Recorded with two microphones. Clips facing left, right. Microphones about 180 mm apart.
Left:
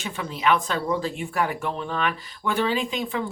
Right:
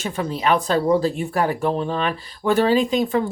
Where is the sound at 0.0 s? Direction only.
40° right (ahead or behind).